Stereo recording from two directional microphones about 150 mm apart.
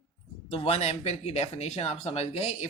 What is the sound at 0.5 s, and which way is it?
Speech, 40° left (ahead or behind).